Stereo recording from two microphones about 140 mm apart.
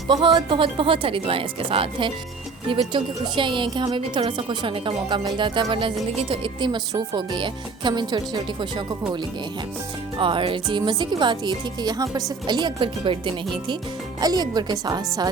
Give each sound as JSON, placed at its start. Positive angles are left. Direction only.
{"t": 0.3, "sound": "speech", "side_deg": -35}
{"t": 10.2, "sound": "speech", "side_deg": -40}